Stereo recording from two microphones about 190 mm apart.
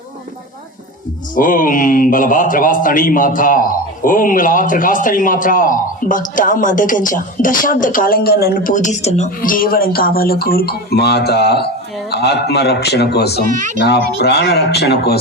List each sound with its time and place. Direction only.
1.4 s a man's voice: 45° left (ahead or behind)
13.4 s speech: 40° right (ahead or behind)
13.7 s a man's voice: 60° left (ahead or behind)